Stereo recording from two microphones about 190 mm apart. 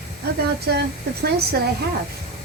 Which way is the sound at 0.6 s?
60° right (ahead or behind).